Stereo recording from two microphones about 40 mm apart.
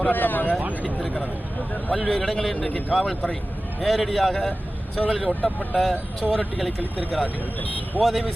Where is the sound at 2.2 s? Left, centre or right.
Centre.